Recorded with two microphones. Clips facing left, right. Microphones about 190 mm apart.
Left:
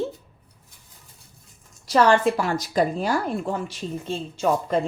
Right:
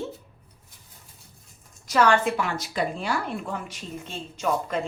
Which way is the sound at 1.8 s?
35° left (ahead or behind).